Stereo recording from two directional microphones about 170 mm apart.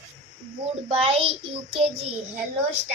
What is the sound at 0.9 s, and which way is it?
Speech, 35° right (ahead or behind).